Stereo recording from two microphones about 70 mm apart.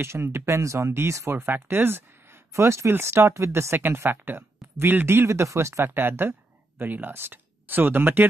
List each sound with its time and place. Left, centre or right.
0.0 s speech: right